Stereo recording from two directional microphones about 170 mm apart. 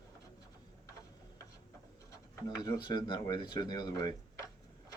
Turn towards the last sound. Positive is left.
turn(degrees=25)  # may be behind; listen again after turning